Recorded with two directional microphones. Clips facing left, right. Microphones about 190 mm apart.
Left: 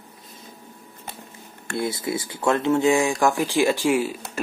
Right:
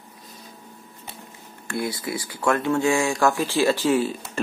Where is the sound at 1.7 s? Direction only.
25° left (ahead or behind).